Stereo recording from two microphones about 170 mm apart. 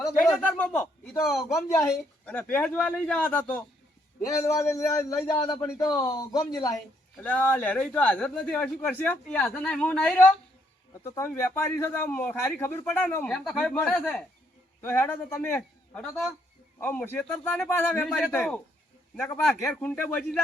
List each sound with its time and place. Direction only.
0.6 s a man's voice: 10° left (ahead or behind)
1.2 s a man's voice: centre (ahead or behind); by 6.4 s 25° left (ahead or behind)
7.2 s a man's voice: 10° left (ahead or behind)